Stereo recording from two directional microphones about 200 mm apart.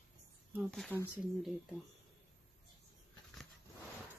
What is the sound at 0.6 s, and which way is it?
Speech, 5° left (ahead or behind).